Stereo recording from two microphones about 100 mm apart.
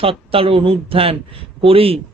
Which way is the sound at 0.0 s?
70° right (ahead or behind).